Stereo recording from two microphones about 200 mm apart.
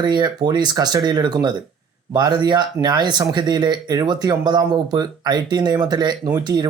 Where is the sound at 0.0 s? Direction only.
20° right (ahead or behind).